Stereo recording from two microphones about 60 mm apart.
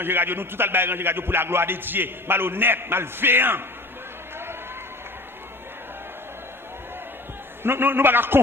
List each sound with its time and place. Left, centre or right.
0.0 s speech: right
7.6 s speech: right